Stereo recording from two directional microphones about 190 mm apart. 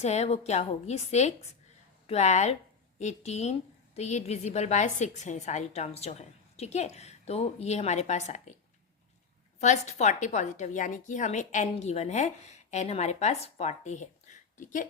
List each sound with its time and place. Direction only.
0.0 s a woman's voice: 35° left (ahead or behind)
9.6 s a woman's voice: 35° left (ahead or behind)